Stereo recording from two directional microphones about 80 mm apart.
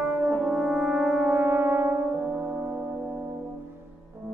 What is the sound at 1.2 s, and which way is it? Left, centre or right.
Music, right.